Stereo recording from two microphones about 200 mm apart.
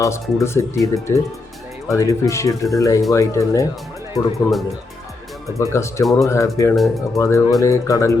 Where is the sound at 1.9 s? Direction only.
15° left (ahead or behind).